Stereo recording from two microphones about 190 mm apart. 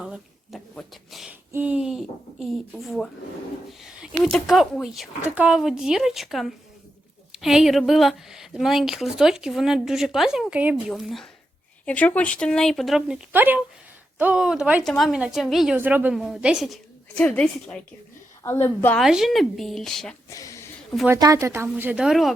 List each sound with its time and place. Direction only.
0.0 s a sound: centre (ahead or behind)
3.7 s speech: 5° right (ahead or behind)
17.2 s a woman's voice: 5° left (ahead or behind)
18.9 s speech: centre (ahead or behind)
20.3 s a sound: 15° left (ahead or behind)
21.1 s speech: 15° right (ahead or behind); by 22.3 s centre (ahead or behind)